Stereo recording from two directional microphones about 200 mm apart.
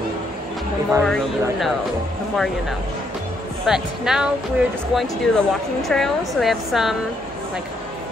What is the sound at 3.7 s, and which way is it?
Speech, 5° right (ahead or behind).